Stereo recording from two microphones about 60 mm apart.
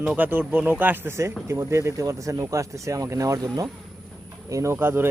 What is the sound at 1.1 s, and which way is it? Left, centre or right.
Speech, right.